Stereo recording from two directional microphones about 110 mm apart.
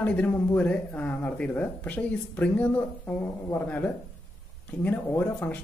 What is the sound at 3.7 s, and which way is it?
Speech, 15° left (ahead or behind).